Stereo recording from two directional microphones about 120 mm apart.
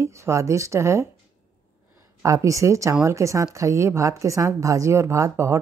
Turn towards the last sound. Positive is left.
turn(degrees=-25)  # may be behind; listen again after turning